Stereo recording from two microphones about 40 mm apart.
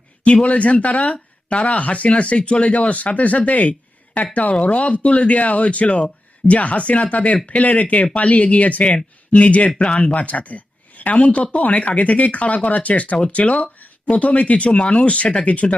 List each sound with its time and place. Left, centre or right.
0.4 s speech: left